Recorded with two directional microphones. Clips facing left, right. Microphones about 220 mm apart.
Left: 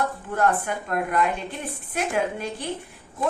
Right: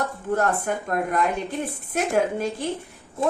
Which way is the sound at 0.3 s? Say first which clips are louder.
Left 1 dB; 45° right (ahead or behind).